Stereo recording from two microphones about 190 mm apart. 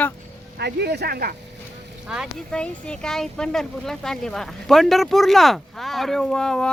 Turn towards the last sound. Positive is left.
turn(degrees=5)  # may be behind; listen again after turning